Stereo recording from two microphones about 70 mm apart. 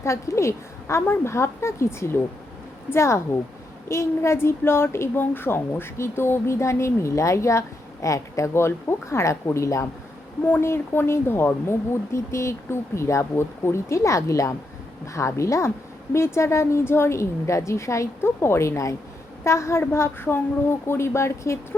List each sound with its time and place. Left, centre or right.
0.0 s speech: left
10.4 s speech: left